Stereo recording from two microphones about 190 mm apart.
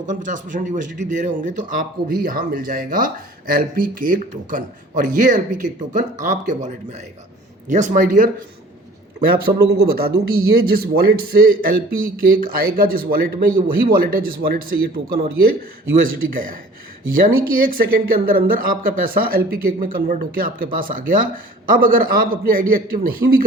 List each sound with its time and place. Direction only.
0.0 s speech: 40° right (ahead or behind)
9.3 s speech: 55° right (ahead or behind)